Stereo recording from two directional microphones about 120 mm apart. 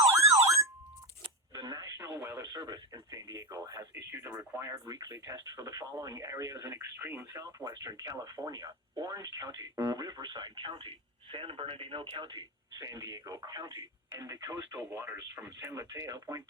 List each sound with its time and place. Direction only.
0.1 s alarm clock: 25° right (ahead or behind)
1.5 s radio: 35° right (ahead or behind)
4.6 s speech: 30° right (ahead or behind)